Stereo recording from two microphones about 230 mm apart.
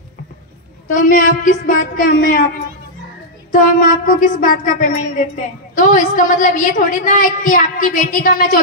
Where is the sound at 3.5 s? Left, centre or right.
Left.